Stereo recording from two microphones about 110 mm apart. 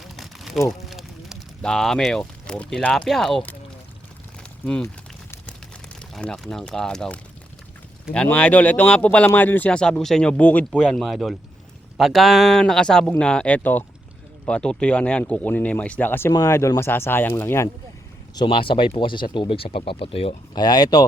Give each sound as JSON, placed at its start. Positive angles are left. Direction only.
{"t": 0.0, "sound": "a sound", "side_deg": 0}
{"t": 0.7, "sound": "speech", "side_deg": 0}
{"t": 4.6, "sound": "speech", "side_deg": 10}
{"t": 6.0, "sound": "speech", "side_deg": 5}
{"t": 18.4, "sound": "speech", "side_deg": 50}
{"t": 20.6, "sound": "speech", "side_deg": 35}